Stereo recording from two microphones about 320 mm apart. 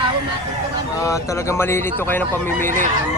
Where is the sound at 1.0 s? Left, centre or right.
Centre.